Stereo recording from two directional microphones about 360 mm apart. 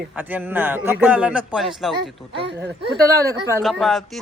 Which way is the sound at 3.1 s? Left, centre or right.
Centre.